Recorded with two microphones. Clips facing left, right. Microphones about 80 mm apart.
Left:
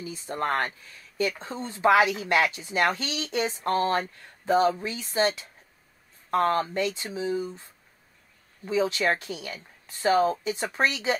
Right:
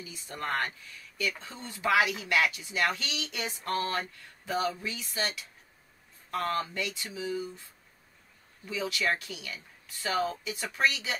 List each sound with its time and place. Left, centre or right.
0.0 s speech: left